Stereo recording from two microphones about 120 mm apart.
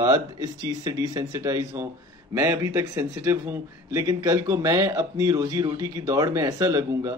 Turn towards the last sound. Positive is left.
turn(degrees=-30)  # may be behind; listen again after turning